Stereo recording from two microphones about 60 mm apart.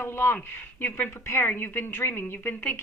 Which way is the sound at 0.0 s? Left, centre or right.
Left.